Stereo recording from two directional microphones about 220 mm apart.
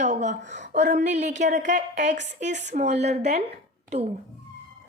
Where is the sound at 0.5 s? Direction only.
35° right (ahead or behind).